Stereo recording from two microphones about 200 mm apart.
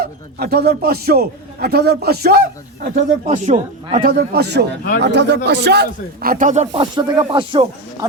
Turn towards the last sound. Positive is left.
turn(degrees=-25)  # may be behind; listen again after turning